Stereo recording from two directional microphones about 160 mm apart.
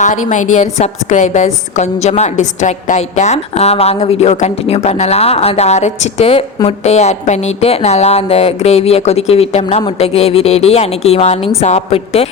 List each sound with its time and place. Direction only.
0.0 s a woman's voice: 50° left (ahead or behind)